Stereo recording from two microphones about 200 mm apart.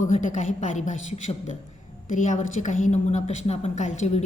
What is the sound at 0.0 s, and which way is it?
A woman's voice, 40° left (ahead or behind).